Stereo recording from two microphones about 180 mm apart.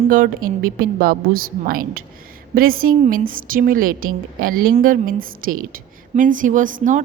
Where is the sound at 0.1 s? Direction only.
50° right (ahead or behind).